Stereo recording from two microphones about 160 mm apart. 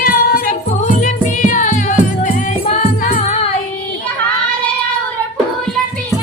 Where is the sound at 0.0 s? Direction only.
65° left (ahead or behind).